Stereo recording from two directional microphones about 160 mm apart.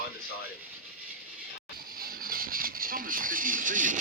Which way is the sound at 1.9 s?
65° right (ahead or behind).